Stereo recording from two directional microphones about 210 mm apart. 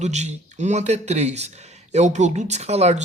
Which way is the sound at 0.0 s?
35° right (ahead or behind).